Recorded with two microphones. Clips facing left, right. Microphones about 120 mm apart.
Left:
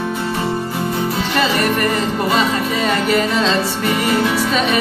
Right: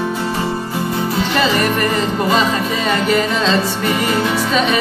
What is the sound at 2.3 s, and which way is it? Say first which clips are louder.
Music: right 1 dB; 25° right (ahead or behind).